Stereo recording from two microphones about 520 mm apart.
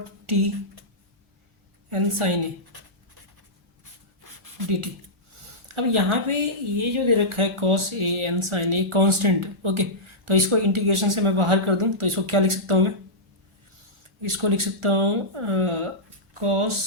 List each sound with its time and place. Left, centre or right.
0.3 s speech: right
1.9 s speech: right
5.4 s a woman's voice: right
14.2 s speech: right